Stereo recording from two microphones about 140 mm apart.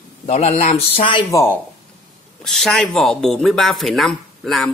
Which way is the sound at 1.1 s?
35° left (ahead or behind).